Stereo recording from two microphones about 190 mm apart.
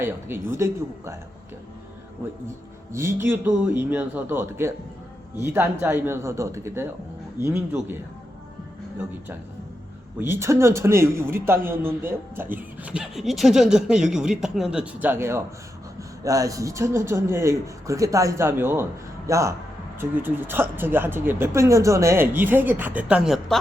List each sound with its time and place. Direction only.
0.0 s speech: 10° right (ahead or behind)
2.9 s speech: 15° right (ahead or behind)
10.2 s speech: 15° right (ahead or behind)